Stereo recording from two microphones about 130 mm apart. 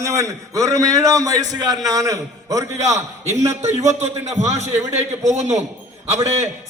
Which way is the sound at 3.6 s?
60° right (ahead or behind).